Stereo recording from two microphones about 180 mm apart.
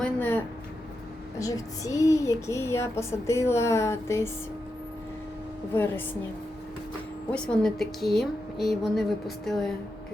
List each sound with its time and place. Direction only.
0.0 s speech: 10° left (ahead or behind)
7.3 s a woman's voice: 5° left (ahead or behind)